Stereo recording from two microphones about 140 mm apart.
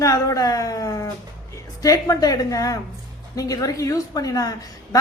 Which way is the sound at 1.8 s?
25° left (ahead or behind).